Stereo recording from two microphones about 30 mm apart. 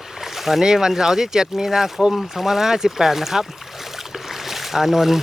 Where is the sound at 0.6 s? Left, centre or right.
Centre.